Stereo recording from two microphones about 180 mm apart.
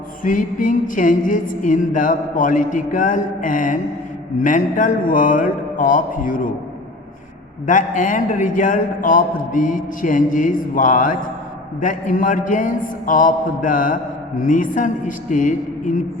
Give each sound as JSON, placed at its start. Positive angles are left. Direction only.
{"t": 0.2, "sound": "a man's voice", "side_deg": 50}
{"t": 7.7, "sound": "a man's voice", "side_deg": 45}